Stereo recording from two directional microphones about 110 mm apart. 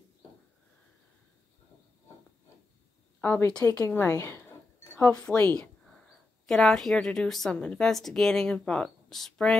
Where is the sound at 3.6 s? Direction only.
25° left (ahead or behind).